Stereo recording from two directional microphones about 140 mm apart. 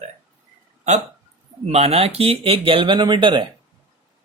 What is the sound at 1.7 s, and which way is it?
Speech, 45° right (ahead or behind).